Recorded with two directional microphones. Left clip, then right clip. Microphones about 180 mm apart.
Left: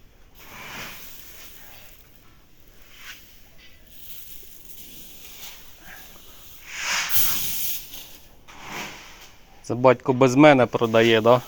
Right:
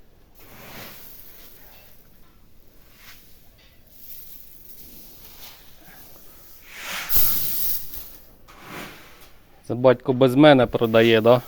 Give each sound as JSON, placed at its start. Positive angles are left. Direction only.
{"t": 6.7, "sound": "a sound", "side_deg": -45}
{"t": 9.6, "sound": "speech", "side_deg": -10}
{"t": 10.7, "sound": "speech", "side_deg": -25}